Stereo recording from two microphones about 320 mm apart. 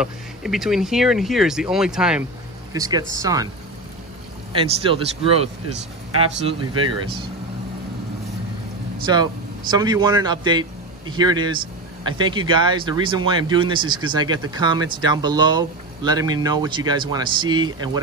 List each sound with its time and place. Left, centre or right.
0.0 s speech: centre
4.6 s speech: centre
9.0 s a man's voice: centre